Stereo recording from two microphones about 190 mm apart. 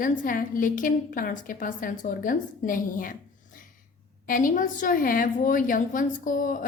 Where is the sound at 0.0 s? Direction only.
45° left (ahead or behind).